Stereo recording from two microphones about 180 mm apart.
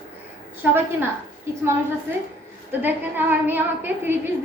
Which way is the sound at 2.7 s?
10° right (ahead or behind).